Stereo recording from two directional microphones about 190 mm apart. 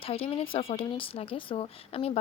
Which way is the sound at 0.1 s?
30° left (ahead or behind).